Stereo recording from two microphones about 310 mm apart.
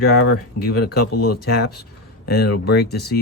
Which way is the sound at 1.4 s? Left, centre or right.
Left.